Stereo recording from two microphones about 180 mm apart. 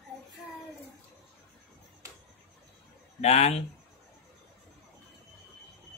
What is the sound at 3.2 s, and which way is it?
Speech, 35° left (ahead or behind).